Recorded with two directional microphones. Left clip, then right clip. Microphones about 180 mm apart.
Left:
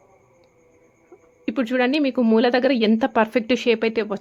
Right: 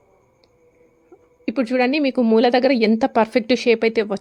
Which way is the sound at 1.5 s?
25° right (ahead or behind).